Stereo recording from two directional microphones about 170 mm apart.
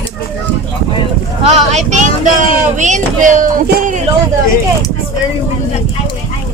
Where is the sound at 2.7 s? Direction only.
45° right (ahead or behind).